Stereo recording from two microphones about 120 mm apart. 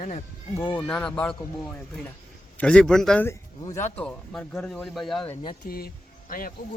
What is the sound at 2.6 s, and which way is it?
Speech, 5° left (ahead or behind).